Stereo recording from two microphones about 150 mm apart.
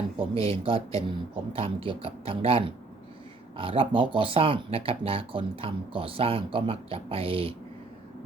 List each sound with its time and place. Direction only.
0.2 s speech: 40° right (ahead or behind)